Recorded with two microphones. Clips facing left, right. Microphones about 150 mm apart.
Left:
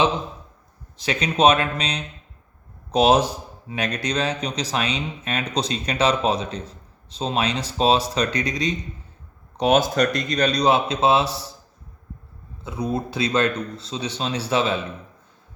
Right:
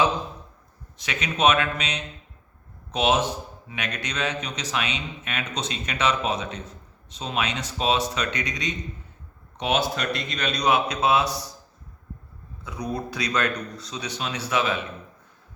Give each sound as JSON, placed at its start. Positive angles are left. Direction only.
{"t": 0.9, "sound": "speech", "side_deg": 35}
{"t": 12.6, "sound": "speech", "side_deg": 25}